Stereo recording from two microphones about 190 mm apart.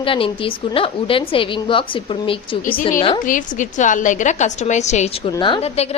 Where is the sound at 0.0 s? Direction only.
30° left (ahead or behind).